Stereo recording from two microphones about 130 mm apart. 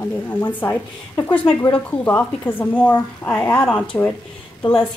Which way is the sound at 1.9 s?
15° left (ahead or behind).